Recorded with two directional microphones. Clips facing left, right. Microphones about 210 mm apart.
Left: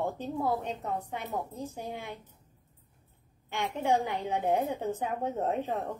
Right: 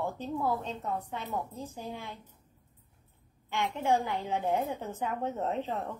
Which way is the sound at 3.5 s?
15° left (ahead or behind).